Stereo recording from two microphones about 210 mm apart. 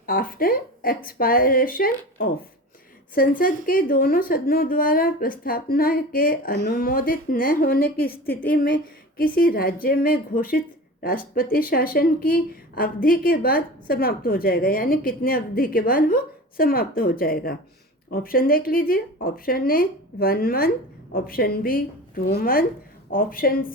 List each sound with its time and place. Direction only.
0.0 s speech: 45° left (ahead or behind)